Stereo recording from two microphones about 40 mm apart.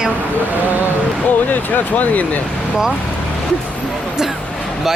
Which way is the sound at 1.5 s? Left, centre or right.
Left.